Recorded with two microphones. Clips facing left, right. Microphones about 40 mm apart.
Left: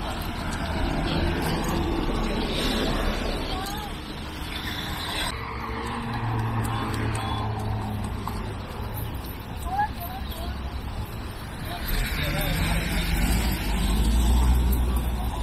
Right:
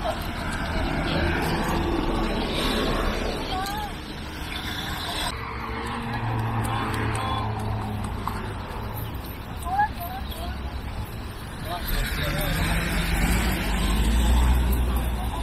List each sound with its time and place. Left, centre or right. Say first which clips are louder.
0.4 s vehicle: right 1 dB; centre
0.7 s vehicle: right 1 dB; centre
5.8 s vehicle: right 1 dB; centre
12.2 s vehicle: right 1 dB; centre; by 14.4 s right
14.4 s vehicle: right 1 dB; right